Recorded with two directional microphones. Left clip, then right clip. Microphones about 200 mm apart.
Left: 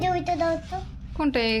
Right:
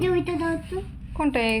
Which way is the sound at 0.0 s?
25° left (ahead or behind).